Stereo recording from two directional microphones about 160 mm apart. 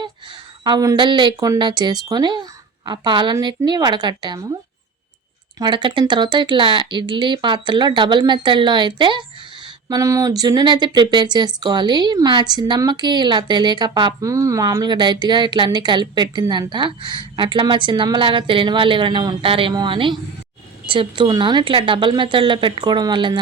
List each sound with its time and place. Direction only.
0.6 s speech: 25° right (ahead or behind)
5.5 s speech: 30° right (ahead or behind)